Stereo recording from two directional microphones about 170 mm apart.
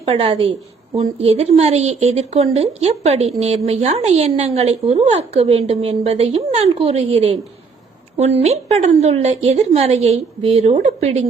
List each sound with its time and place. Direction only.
0.0 s speech: 35° right (ahead or behind)